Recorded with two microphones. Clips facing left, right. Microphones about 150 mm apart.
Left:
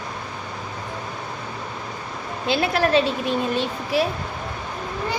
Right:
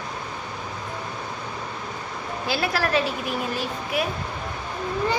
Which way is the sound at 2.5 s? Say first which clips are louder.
Left 5 dB; 20° left (ahead or behind).